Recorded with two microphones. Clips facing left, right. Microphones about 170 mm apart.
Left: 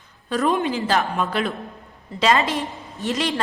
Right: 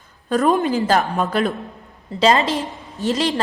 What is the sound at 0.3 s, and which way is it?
A man's voice, 45° right (ahead or behind).